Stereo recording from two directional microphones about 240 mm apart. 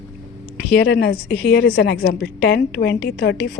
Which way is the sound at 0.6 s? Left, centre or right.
Left.